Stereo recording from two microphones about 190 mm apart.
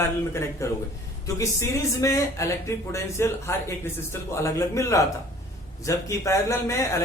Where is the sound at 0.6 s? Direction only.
15° left (ahead or behind).